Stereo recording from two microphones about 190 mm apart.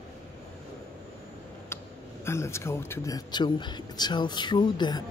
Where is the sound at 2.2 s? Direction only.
15° left (ahead or behind).